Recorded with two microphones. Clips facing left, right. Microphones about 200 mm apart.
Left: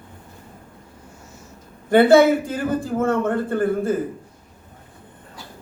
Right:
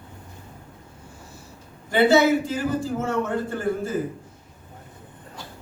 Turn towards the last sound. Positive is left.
turn(degrees=55)  # may be behind; listen again after turning